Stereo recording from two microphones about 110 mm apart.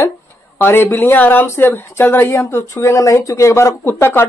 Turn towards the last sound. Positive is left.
turn(degrees=20)  # may be behind; listen again after turning